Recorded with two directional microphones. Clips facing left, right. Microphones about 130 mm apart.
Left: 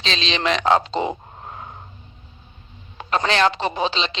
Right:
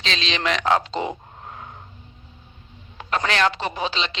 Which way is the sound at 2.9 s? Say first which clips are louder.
Left 3 dB; 25° left (ahead or behind).